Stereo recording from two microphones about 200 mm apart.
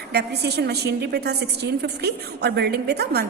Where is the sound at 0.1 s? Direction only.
55° right (ahead or behind).